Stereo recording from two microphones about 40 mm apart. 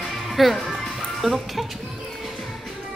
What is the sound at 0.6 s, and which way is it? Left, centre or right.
Music, centre.